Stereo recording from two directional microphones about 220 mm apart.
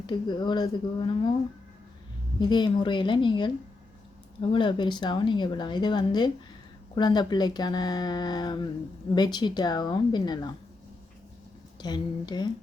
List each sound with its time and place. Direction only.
0.1 s speech: 20° left (ahead or behind)
2.4 s speech: 20° left (ahead or behind)
4.5 s speech: 20° left (ahead or behind)
11.8 s speech: 20° left (ahead or behind)